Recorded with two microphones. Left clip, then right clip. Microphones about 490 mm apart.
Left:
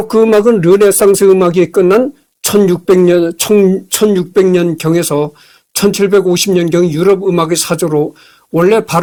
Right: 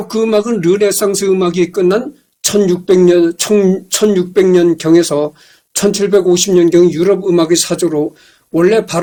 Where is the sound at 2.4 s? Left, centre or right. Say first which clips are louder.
Left 2 dB; left.